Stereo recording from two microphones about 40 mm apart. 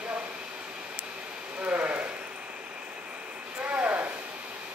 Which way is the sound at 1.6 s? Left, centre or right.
Right.